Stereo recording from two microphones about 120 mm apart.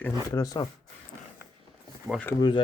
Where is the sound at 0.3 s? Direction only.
30° left (ahead or behind).